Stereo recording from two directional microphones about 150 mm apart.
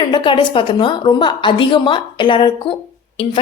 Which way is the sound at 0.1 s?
30° left (ahead or behind).